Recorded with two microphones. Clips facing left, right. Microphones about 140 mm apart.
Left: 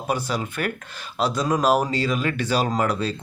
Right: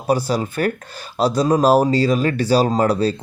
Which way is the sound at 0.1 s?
35° right (ahead or behind).